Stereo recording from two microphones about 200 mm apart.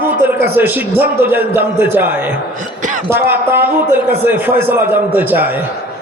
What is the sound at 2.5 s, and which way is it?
Speech, 40° right (ahead or behind).